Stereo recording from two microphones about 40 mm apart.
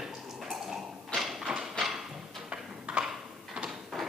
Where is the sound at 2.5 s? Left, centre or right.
Right.